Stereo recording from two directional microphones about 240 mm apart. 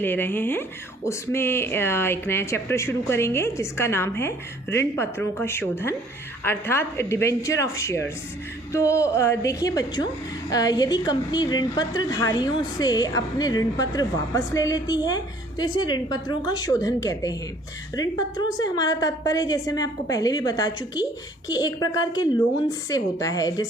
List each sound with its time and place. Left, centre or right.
0.0 s a woman's voice: centre